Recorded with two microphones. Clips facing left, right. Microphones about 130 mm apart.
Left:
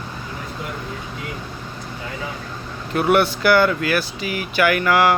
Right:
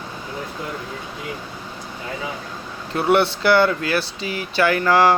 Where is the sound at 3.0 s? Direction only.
25° right (ahead or behind).